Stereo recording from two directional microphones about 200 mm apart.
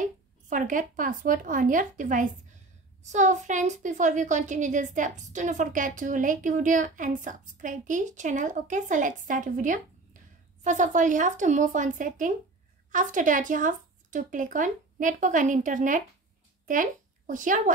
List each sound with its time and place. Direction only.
0.0 s a woman's voice: 40° right (ahead or behind)
17.3 s a woman's voice: 40° right (ahead or behind)